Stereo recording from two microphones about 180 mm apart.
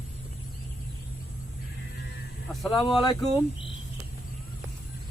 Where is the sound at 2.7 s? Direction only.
25° left (ahead or behind).